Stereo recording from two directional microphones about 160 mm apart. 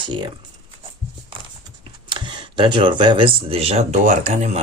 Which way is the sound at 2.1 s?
30° right (ahead or behind).